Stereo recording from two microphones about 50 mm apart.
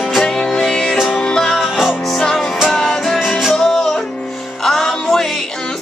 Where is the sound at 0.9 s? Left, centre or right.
Centre.